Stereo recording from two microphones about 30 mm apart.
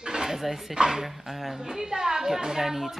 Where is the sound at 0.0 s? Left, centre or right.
Right.